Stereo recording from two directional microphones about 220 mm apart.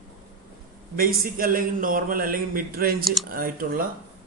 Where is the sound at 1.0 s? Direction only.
40° right (ahead or behind).